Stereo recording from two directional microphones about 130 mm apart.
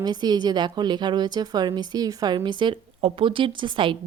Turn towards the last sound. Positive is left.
turn(degrees=-40)  # may be behind; listen again after turning